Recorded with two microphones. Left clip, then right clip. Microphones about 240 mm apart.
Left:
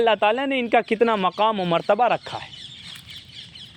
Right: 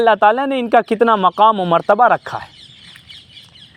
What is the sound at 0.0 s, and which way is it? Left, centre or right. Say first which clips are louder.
A man's voice: right 7 dB; right.